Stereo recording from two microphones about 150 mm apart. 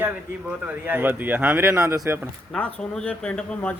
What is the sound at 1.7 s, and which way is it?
Speech, 20° right (ahead or behind).